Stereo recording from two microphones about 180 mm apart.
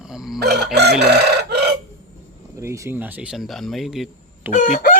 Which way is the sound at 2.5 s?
15° right (ahead or behind).